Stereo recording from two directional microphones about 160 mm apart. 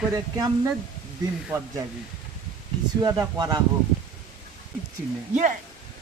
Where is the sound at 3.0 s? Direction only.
20° right (ahead or behind).